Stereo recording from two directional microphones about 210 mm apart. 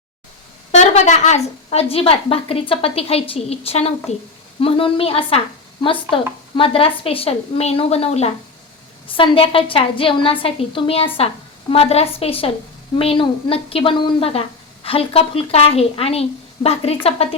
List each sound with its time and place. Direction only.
0.7 s a woman's voice: 35° left (ahead or behind)